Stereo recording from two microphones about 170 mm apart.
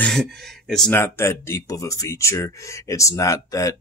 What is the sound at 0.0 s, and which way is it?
Speech, centre (ahead or behind).